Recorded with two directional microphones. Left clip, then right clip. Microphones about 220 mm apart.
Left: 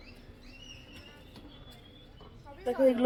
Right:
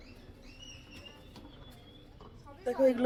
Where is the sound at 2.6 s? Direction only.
15° left (ahead or behind).